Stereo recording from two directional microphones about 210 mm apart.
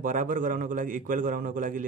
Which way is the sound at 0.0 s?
40° right (ahead or behind).